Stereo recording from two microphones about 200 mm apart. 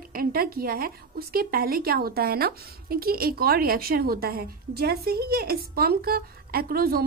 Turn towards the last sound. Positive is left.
turn(degrees=-50)  # may be behind; listen again after turning